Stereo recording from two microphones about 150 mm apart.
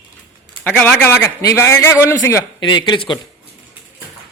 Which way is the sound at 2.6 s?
30° left (ahead or behind).